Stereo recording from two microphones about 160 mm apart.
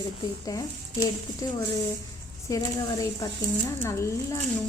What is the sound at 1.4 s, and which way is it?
Speech, 20° left (ahead or behind).